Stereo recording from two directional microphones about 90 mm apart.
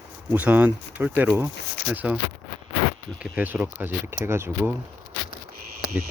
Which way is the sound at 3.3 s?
15° right (ahead or behind).